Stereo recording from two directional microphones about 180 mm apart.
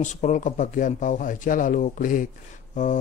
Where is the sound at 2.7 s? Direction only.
45° left (ahead or behind).